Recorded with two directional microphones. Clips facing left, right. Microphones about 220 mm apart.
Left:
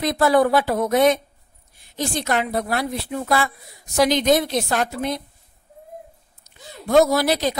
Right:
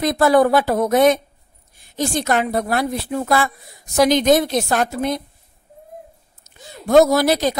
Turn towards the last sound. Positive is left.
turn(degrees=-45)  # may be behind; listen again after turning